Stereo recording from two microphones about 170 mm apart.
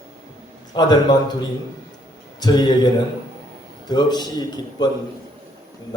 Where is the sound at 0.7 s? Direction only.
25° left (ahead or behind).